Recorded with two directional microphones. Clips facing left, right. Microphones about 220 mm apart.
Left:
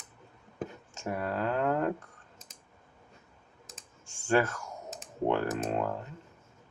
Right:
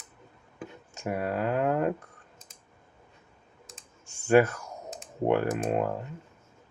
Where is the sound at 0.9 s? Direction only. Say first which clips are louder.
Right 4 dB; 15° right (ahead or behind).